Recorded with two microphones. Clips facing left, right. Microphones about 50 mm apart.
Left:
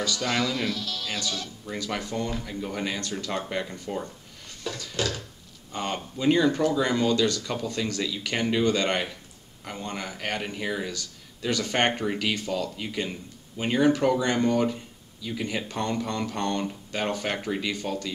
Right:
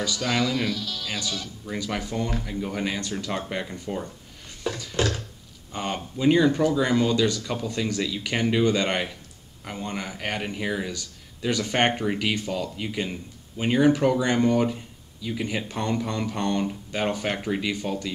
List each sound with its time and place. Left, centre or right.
0.0 s a man's voice: centre
4.7 s a sound: centre
5.7 s a man's voice: centre